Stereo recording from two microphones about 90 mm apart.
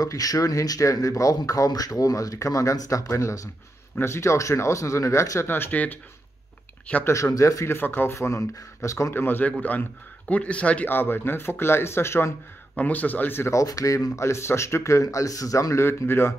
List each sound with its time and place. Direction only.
0.0 s speech: 45° left (ahead or behind)
5.5 s speech: 20° left (ahead or behind)
7.3 s speech: 35° left (ahead or behind)
12.7 s speech: 20° left (ahead or behind)